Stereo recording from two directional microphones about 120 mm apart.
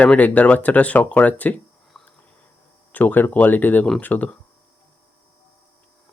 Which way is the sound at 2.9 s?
15° left (ahead or behind).